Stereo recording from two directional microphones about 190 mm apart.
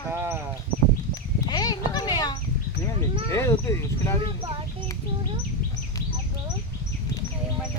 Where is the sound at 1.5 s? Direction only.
20° left (ahead or behind).